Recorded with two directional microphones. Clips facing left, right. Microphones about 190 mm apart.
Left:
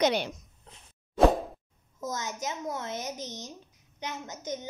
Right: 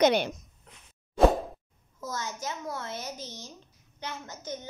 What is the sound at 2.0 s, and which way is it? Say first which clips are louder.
A child's voice: left 2 dB; 20° left (ahead or behind).